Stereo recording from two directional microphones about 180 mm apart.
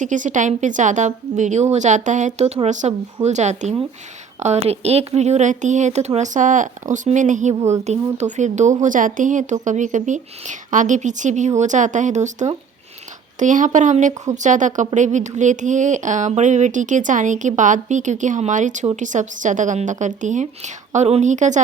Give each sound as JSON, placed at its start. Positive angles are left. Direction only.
{"t": 0.0, "sound": "speech", "side_deg": -45}